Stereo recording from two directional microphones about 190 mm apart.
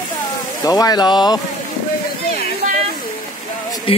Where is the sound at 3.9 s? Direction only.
30° left (ahead or behind).